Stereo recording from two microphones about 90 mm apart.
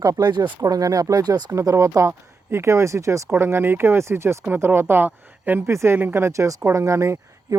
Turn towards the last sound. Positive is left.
turn(degrees=-35)  # may be behind; listen again after turning